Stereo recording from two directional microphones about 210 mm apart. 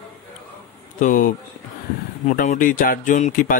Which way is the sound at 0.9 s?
40° left (ahead or behind).